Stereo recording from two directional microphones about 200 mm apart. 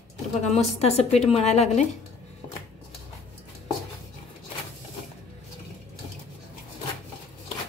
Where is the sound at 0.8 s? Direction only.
30° left (ahead or behind).